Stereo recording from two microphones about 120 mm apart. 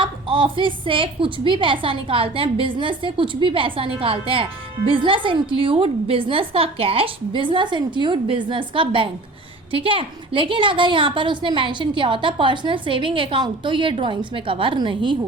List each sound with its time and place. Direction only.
0.0 s a woman's voice: 45° right (ahead or behind)